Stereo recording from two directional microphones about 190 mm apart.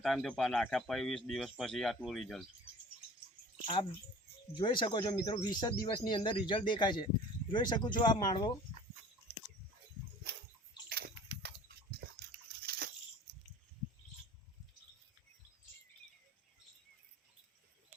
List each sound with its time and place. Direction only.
0.0 s speech: centre (ahead or behind)
4.5 s speech: 25° left (ahead or behind)
10.8 s bathtub: 55° right (ahead or behind)
12.6 s a sound: 55° right (ahead or behind)